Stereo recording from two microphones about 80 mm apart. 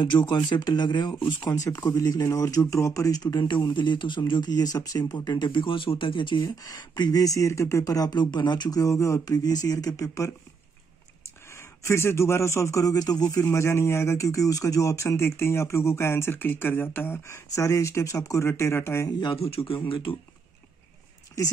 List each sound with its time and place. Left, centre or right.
0.0 s speech: left
1.5 s speech: left
2.2 s speech: left
3.2 s speech: left
3.7 s speech: left
4.3 s speech: left
6.4 s speech: left
11.5 s speech: left
13.4 s speech: left
18.5 s speech: left
19.1 s speech: left
19.9 s speech: left